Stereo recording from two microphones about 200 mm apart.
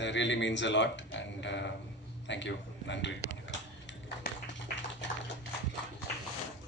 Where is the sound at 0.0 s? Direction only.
65° left (ahead or behind).